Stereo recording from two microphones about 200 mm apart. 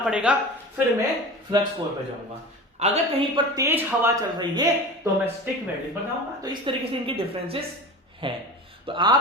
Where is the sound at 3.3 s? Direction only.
15° right (ahead or behind).